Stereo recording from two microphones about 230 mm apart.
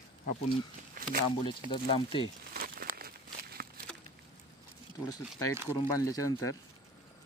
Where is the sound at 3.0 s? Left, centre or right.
Right.